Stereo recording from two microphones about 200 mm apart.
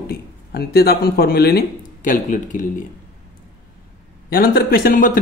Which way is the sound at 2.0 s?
40° left (ahead or behind).